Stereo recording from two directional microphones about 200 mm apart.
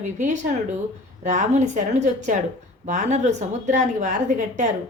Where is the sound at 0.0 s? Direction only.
35° right (ahead or behind).